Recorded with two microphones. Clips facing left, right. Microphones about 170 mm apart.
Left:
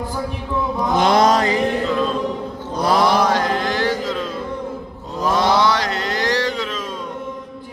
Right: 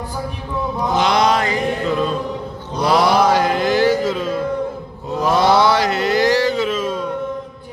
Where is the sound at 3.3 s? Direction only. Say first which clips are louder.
Right 4 dB; 5° right (ahead or behind).